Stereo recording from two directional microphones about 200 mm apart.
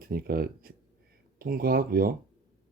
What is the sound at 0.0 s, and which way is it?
A man's voice, 50° right (ahead or behind).